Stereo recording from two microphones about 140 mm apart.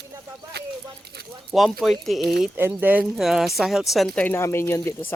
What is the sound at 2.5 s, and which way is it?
Speech, 15° right (ahead or behind).